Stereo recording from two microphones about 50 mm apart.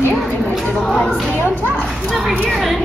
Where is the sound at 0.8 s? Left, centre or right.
Centre.